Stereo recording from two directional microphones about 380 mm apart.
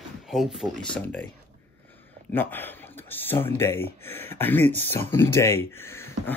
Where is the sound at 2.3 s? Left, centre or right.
Centre.